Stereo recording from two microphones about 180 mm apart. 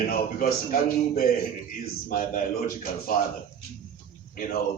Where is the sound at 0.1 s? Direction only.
50° left (ahead or behind).